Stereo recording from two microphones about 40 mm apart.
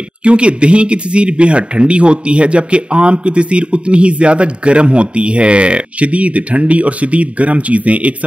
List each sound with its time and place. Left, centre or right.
0.2 s speech: right